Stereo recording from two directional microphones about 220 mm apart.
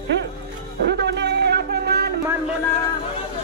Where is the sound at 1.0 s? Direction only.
50° right (ahead or behind).